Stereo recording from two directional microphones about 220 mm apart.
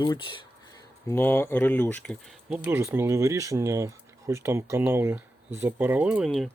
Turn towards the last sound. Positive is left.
turn(degrees=0)  # may be behind; listen again after turning